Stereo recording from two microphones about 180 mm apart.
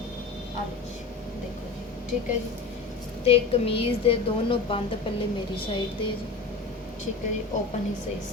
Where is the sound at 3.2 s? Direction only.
35° left (ahead or behind).